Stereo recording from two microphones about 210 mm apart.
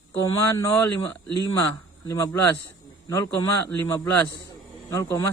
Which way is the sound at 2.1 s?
15° left (ahead or behind).